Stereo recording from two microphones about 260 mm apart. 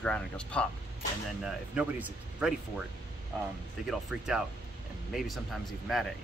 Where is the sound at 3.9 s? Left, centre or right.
Centre.